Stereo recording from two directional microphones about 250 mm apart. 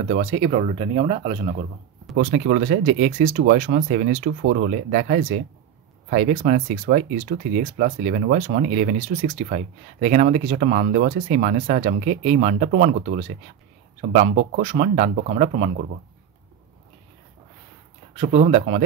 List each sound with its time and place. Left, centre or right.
0.1 s speech: right
2.1 s speech: right
18.1 s speech: right